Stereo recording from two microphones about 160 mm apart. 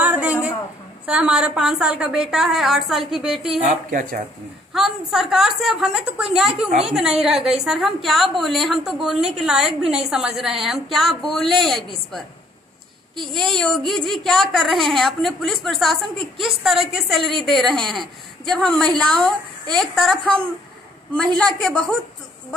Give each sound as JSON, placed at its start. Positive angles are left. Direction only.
{"t": 0.0, "sound": "a sound", "side_deg": -10}
{"t": 1.0, "sound": "a woman's voice", "side_deg": -5}
{"t": 3.6, "sound": "speech", "side_deg": -50}
{"t": 4.7, "sound": "a woman's voice", "side_deg": 0}
{"t": 13.3, "sound": "a woman's voice", "side_deg": 5}
{"t": 21.5, "sound": "a woman's voice", "side_deg": 5}